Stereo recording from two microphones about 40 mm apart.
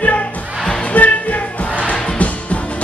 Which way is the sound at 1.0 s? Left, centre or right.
Left.